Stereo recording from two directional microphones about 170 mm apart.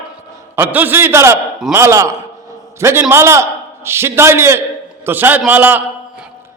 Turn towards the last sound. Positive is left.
turn(degrees=-10)  # may be behind; listen again after turning